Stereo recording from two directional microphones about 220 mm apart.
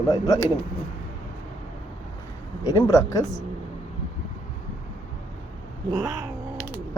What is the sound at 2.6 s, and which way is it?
Speech, 15° left (ahead or behind).